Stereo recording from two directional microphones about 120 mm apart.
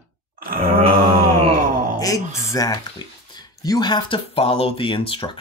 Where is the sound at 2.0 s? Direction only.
30° left (ahead or behind).